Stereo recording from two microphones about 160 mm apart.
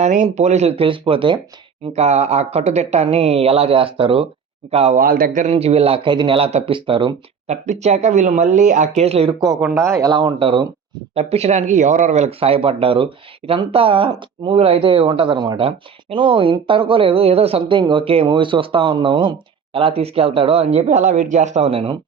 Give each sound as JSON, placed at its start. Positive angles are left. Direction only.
{"t": 0.0, "sound": "speech", "side_deg": -45}
{"t": 1.9, "sound": "speech", "side_deg": -45}
{"t": 4.9, "sound": "speech", "side_deg": -65}
{"t": 7.5, "sound": "speech", "side_deg": -45}
{"t": 9.7, "sound": "speech", "side_deg": -20}
{"t": 11.1, "sound": "speech", "side_deg": -40}